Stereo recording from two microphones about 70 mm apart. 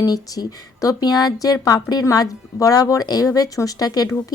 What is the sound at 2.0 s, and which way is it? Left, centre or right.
A woman's voice, left.